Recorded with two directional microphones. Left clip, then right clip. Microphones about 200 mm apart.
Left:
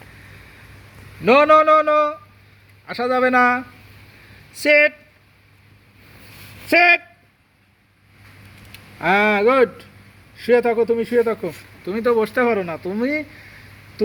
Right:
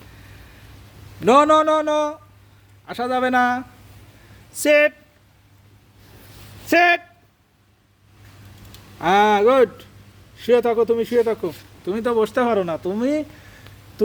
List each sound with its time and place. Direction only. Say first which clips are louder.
1.2 s speech: left 1 dB; 15° right (ahead or behind)
6.7 s speech: left 2 dB; 5° right (ahead or behind)
9.0 s speech: right 1 dB; 10° right (ahead or behind)
11.9 s speech: left 2 dB; 15° right (ahead or behind)